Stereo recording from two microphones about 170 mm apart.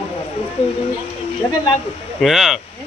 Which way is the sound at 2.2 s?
Centre (ahead or behind).